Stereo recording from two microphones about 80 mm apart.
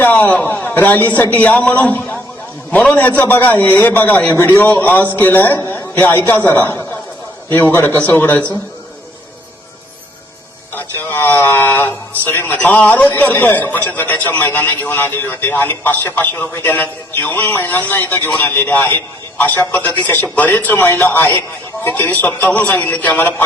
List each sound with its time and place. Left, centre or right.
0.0 s a man's voice: left
10.8 s a man's voice: left